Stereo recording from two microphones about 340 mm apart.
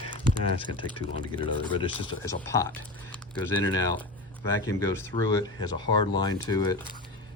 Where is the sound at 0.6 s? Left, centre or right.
Centre.